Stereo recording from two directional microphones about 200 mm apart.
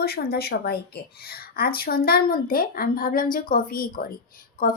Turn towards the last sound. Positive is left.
turn(degrees=45)  # may be behind; listen again after turning